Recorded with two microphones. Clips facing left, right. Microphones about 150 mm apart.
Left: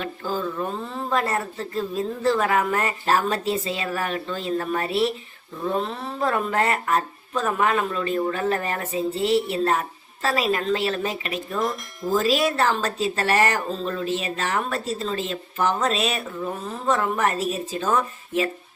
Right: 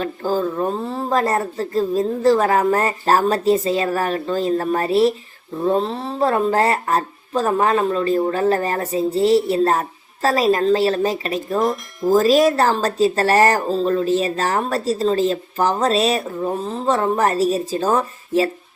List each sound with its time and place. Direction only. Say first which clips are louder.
0.0 s speech: right 7 dB; 40° right (ahead or behind)